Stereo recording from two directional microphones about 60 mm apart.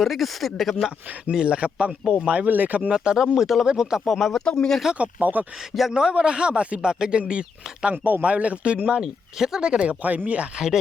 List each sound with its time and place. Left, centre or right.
0.0 s speech: centre
0.9 s speech: centre
2.9 s speech: centre
4.4 s speech: centre
4.9 s speech: right
5.9 s speech: centre
10.0 s speech: right